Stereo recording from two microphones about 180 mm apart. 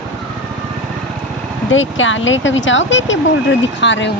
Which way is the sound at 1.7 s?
90° left.